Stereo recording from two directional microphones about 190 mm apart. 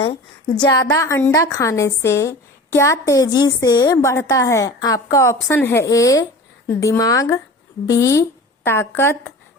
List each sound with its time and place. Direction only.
0.6 s a woman's voice: 20° left (ahead or behind)